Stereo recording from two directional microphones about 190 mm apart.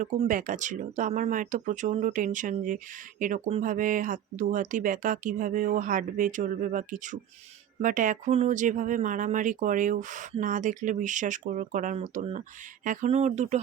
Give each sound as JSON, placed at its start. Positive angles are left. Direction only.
{"t": 0.2, "sound": "speech", "side_deg": -45}